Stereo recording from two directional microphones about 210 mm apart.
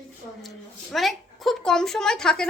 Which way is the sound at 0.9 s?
Centre (ahead or behind).